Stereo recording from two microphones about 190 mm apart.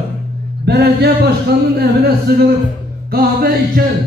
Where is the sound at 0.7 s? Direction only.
55° right (ahead or behind).